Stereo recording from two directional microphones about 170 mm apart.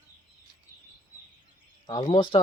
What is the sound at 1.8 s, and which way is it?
Speech, 25° left (ahead or behind).